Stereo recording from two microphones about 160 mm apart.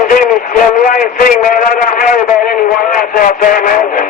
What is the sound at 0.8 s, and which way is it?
Speech, 60° left (ahead or behind).